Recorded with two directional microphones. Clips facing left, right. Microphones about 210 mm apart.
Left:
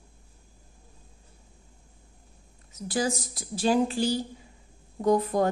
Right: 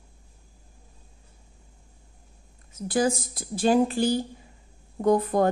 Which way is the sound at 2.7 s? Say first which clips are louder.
Right 4 dB; 55° right (ahead or behind).